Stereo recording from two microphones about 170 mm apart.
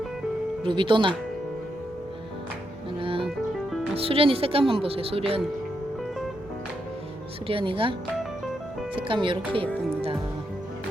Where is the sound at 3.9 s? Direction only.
35° right (ahead or behind).